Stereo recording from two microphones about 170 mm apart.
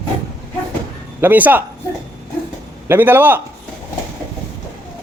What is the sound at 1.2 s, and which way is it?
Speech, 10° right (ahead or behind).